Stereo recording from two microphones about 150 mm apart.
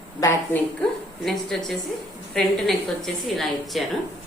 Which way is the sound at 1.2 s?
5° left (ahead or behind).